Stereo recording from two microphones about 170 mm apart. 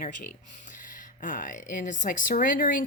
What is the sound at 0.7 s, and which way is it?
Speech, 50° left (ahead or behind).